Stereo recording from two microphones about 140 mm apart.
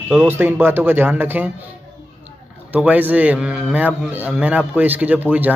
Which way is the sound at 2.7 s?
10° right (ahead or behind).